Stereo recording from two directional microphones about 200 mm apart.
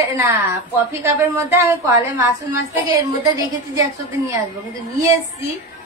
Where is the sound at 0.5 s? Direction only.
15° right (ahead or behind).